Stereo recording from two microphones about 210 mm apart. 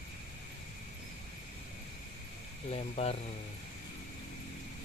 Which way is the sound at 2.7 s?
30° left (ahead or behind).